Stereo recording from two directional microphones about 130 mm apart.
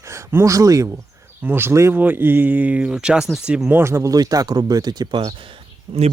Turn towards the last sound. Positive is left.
turn(degrees=-45)  # may be behind; listen again after turning